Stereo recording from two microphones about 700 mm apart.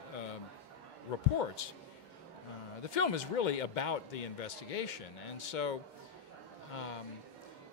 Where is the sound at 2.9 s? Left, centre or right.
Left.